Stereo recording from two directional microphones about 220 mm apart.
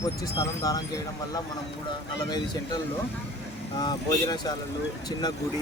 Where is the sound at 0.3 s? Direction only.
15° left (ahead or behind).